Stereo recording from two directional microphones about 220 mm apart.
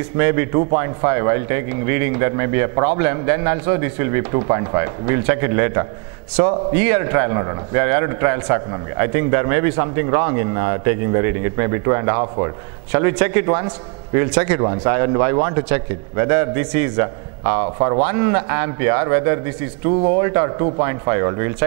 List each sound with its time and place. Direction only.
0.2 s a man's voice: 15° right (ahead or behind)